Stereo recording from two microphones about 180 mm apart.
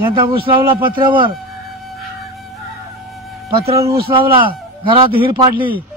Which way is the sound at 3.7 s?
15° right (ahead or behind).